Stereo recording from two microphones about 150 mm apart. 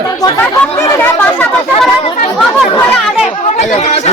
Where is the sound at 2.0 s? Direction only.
40° left (ahead or behind).